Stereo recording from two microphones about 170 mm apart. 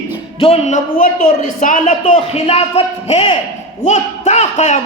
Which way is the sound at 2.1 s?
40° left (ahead or behind).